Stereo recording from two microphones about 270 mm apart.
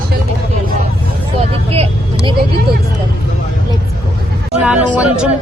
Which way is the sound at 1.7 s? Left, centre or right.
Right.